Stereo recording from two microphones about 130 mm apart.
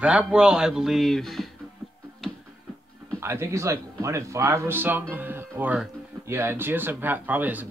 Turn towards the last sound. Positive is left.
turn(degrees=-15)  # may be behind; listen again after turning